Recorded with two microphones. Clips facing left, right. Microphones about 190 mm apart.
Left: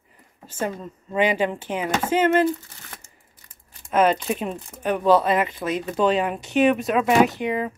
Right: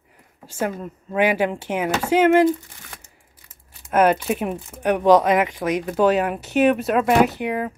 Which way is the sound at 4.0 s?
10° right (ahead or behind).